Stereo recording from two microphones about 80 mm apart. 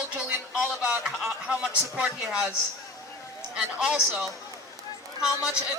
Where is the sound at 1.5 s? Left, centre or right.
Centre.